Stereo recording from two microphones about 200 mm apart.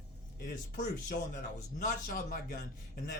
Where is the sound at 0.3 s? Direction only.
45° left (ahead or behind).